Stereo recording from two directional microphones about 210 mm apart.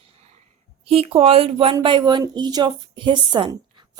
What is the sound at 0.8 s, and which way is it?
A woman's voice, 25° right (ahead or behind).